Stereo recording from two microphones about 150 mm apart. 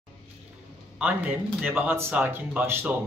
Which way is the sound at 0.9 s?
10° right (ahead or behind).